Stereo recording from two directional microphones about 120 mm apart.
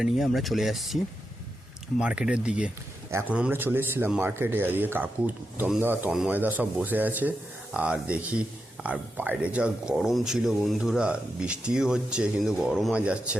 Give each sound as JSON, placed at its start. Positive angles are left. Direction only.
{"t": 0.0, "sound": "speech", "side_deg": 0}
{"t": 2.0, "sound": "speech", "side_deg": -10}